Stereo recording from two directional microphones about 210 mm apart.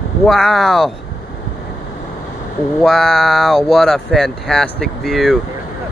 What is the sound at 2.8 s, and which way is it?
Speech, centre (ahead or behind).